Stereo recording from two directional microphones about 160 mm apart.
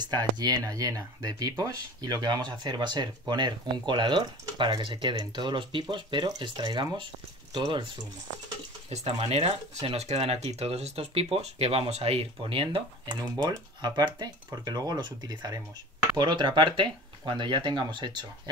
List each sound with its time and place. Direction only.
0.1 s speech: 25° right (ahead or behind)
8.9 s speech: 40° right (ahead or behind)